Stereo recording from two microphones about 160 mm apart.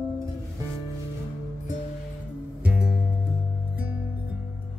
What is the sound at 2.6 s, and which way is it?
Music, 5° right (ahead or behind).